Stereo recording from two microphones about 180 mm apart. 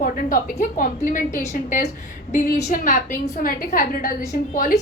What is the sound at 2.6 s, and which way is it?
A woman's voice, 45° left (ahead or behind).